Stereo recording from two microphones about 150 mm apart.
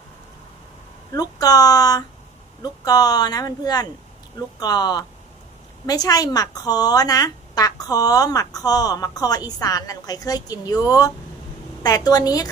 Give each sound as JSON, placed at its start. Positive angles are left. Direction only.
{"t": 1.1, "sound": "speech", "side_deg": 25}